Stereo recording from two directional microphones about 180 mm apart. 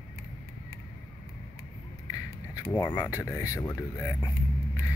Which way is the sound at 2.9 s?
20° left (ahead or behind).